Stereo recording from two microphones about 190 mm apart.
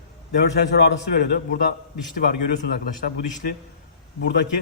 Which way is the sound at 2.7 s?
50° left (ahead or behind).